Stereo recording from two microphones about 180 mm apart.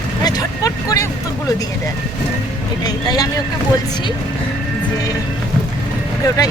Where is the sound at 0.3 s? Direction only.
20° left (ahead or behind).